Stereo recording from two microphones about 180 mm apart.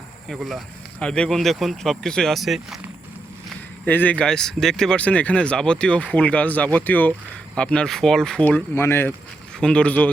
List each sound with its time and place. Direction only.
0.3 s speech: centre (ahead or behind)
3.8 s speech: 10° left (ahead or behind)